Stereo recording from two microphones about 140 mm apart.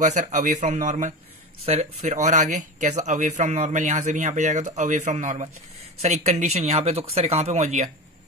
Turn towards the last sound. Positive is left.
turn(degrees=-55)  # may be behind; listen again after turning